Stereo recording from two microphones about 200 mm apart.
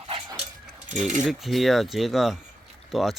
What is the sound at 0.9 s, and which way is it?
Cutlery, 40° right (ahead or behind).